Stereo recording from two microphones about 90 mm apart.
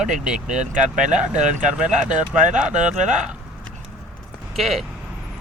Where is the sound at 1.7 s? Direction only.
10° right (ahead or behind).